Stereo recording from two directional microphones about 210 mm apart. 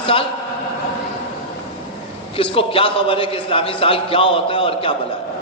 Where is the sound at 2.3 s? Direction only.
25° left (ahead or behind).